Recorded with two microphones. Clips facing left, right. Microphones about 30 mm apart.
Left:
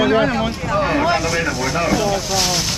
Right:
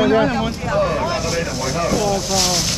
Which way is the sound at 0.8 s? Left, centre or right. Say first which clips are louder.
Left 2 dB; left.